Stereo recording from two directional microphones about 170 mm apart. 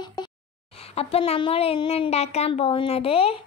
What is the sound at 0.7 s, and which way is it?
Speech, 35° left (ahead or behind).